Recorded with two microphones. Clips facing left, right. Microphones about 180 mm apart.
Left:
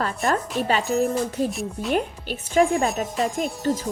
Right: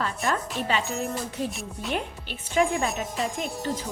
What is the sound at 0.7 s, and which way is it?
Music, 40° left (ahead or behind).